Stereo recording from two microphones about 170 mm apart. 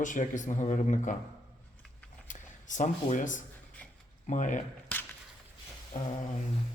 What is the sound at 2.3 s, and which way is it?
Speech, 50° left (ahead or behind).